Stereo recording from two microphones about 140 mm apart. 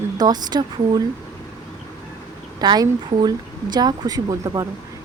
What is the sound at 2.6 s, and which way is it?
A woman's voice, 30° right (ahead or behind).